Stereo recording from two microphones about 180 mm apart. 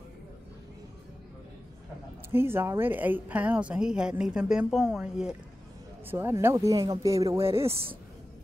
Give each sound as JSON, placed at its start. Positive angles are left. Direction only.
{"t": 2.3, "sound": "speech", "side_deg": -15}